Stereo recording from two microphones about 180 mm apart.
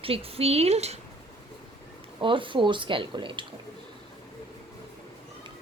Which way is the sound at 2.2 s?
30° right (ahead or behind).